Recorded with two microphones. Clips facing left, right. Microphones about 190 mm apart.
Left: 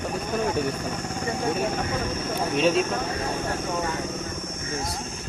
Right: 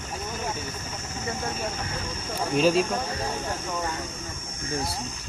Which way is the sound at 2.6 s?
Centre (ahead or behind).